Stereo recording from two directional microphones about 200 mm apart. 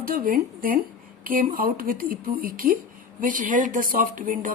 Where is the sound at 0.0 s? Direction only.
45° right (ahead or behind).